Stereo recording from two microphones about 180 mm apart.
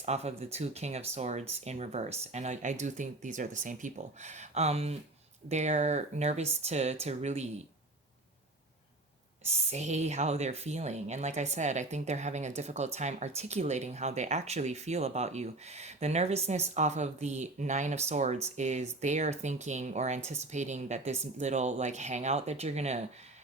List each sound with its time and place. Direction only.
0.0 s speech: 35° right (ahead or behind)
9.5 s speech: 35° right (ahead or behind)